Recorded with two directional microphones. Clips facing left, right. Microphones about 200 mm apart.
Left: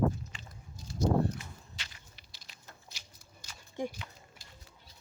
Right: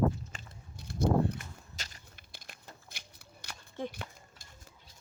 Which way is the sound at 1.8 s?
40° right (ahead or behind).